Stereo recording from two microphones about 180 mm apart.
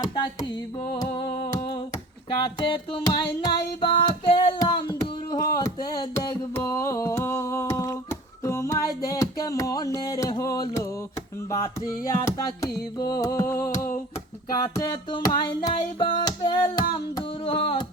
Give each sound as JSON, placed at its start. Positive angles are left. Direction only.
{"t": 0.9, "sound": "music", "side_deg": 25}